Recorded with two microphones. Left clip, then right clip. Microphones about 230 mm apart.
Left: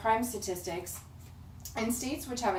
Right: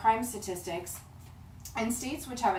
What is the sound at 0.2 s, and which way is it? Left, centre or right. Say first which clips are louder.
Speech: left 1 dB; centre.